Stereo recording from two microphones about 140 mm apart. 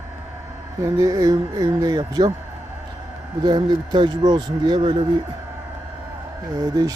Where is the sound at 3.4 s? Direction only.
30° right (ahead or behind).